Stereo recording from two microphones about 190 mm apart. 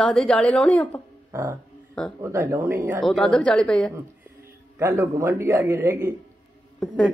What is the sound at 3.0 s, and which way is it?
Speech, 5° left (ahead or behind).